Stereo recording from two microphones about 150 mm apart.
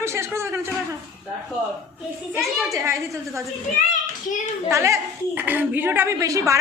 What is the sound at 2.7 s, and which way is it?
Speech, 20° right (ahead or behind).